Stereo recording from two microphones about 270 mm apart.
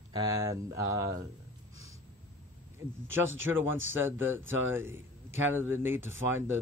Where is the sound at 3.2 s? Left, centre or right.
Right.